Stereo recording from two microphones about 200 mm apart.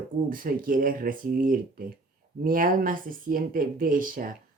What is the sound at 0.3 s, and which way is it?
Speech, 45° right (ahead or behind).